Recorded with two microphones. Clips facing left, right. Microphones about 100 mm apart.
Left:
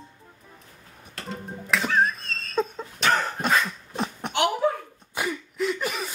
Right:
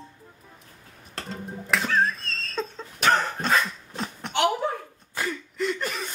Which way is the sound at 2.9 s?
Centre (ahead or behind).